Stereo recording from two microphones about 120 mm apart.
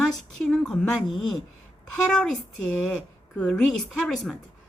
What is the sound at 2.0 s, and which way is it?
A woman's voice, 5° left (ahead or behind).